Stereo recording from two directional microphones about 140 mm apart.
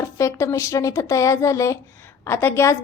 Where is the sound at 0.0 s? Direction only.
20° left (ahead or behind).